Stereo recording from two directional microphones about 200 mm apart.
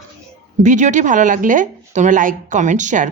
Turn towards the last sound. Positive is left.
turn(degrees=-40)  # may be behind; listen again after turning